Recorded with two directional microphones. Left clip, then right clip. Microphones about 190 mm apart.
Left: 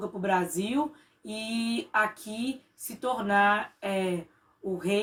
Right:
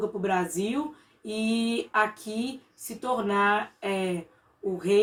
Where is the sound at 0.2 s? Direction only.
20° left (ahead or behind).